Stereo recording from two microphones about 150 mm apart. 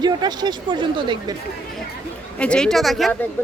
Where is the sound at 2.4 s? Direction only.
5° left (ahead or behind).